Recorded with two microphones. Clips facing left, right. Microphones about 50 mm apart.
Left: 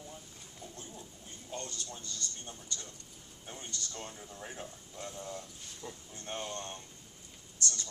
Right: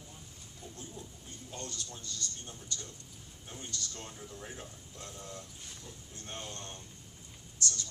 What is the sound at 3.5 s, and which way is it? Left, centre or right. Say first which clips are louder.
Speech: even; centre.